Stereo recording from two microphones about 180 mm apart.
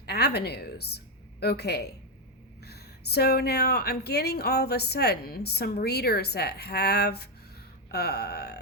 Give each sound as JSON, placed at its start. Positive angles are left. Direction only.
{"t": 0.0, "sound": "a woman's voice", "side_deg": 60}